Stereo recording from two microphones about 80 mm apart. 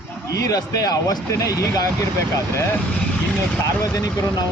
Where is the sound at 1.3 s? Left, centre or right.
Left.